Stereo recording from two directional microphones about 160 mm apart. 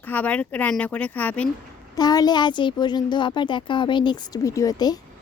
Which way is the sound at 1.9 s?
25° left (ahead or behind).